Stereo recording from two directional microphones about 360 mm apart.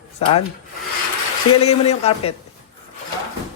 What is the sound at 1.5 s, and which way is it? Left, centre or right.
Speech, centre.